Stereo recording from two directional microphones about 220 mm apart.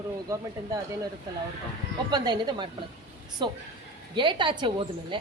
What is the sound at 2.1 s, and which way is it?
Speech, 20° right (ahead or behind).